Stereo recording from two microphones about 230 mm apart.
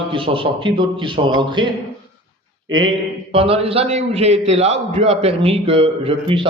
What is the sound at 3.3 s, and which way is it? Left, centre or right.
A man's voice, right.